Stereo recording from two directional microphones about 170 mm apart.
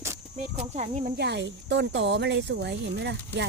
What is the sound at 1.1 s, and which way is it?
Speech, 85° right.